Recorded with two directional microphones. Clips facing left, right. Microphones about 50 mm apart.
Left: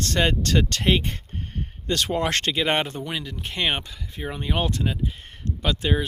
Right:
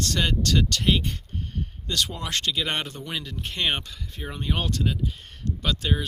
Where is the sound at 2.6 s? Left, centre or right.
Left.